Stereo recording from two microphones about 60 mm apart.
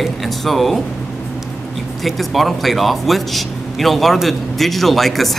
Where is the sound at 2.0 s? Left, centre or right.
Centre.